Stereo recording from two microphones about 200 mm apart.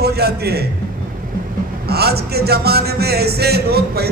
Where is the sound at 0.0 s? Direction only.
55° right (ahead or behind).